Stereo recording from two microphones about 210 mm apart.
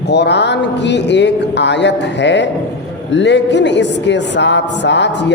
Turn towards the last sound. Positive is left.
turn(degrees=55)  # may be behind; listen again after turning